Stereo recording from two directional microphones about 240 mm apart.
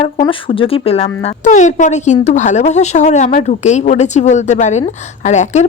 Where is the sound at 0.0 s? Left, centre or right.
Left.